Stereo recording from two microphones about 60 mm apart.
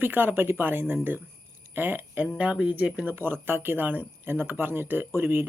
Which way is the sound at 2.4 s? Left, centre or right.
Right.